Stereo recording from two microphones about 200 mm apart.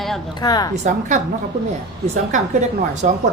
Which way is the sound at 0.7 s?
35° right (ahead or behind).